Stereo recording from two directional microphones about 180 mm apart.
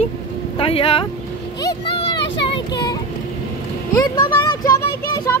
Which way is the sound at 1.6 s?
25° left (ahead or behind).